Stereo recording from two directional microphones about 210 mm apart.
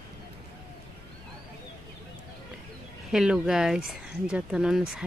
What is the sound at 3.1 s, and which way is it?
Speech, 5° right (ahead or behind).